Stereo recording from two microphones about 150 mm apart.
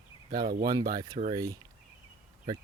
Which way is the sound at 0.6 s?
25° right (ahead or behind).